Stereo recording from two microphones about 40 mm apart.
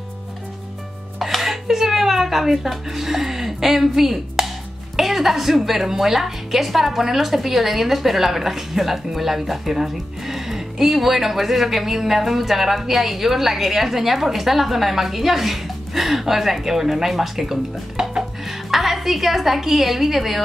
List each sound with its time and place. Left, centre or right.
1.2 s a woman's voice: centre
18.0 s dishes: centre
18.4 s a woman's voice: centre